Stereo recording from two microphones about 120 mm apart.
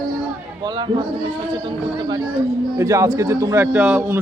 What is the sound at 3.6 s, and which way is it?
Speech, 15° right (ahead or behind).